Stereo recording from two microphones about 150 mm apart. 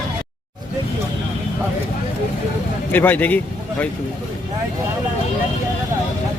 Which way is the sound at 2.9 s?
10° left (ahead or behind).